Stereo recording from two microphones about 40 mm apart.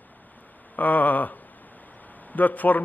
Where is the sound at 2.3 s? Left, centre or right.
Left.